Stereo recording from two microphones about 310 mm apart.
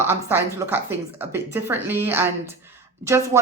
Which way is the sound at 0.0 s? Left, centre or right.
Centre.